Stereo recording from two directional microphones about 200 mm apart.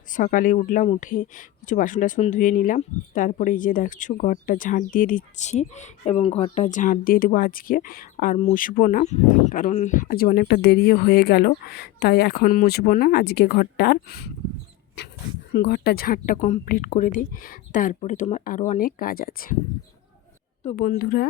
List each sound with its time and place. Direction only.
0.1 s a woman's voice: 40° left (ahead or behind)
15.5 s a woman's voice: 55° left (ahead or behind)
20.7 s a woman's voice: 40° left (ahead or behind)